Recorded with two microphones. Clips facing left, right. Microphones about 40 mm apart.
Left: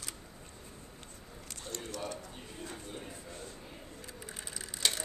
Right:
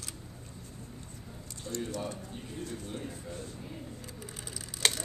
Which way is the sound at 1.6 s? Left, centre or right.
Left.